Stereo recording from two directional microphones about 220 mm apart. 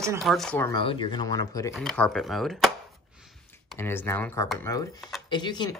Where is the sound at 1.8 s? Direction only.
5° left (ahead or behind).